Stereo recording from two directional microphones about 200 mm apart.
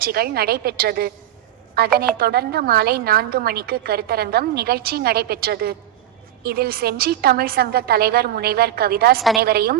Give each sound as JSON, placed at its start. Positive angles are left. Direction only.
{"t": 0.0, "sound": "a woman's voice", "side_deg": -50}